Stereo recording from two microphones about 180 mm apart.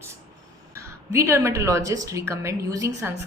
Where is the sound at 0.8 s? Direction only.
15° right (ahead or behind).